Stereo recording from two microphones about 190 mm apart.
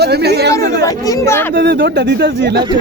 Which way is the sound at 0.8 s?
15° left (ahead or behind).